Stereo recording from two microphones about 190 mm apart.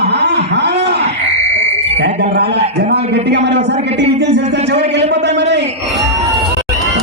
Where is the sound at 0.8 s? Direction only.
60° right (ahead or behind).